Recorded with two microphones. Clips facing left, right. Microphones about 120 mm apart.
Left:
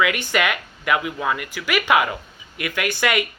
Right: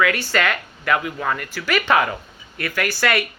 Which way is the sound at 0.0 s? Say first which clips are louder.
Right 1 dB; 15° left (ahead or behind).